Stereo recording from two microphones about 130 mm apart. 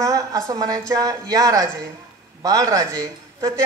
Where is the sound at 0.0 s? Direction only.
25° right (ahead or behind).